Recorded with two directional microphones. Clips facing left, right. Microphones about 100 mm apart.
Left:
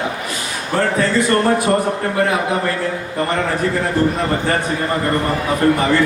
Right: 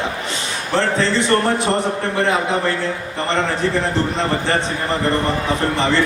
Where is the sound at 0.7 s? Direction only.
25° right (ahead or behind).